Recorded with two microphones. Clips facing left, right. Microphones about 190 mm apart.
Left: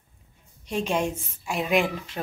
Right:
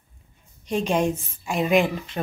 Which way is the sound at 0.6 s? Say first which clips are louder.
Right 3 dB; 40° right (ahead or behind).